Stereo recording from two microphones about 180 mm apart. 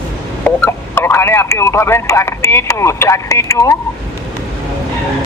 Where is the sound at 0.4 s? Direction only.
15° left (ahead or behind).